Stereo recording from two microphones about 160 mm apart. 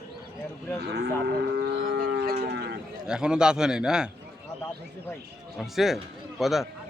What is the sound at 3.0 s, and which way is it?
A man's voice, 5° right (ahead or behind).